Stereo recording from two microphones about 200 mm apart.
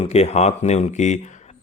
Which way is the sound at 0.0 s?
30° left (ahead or behind).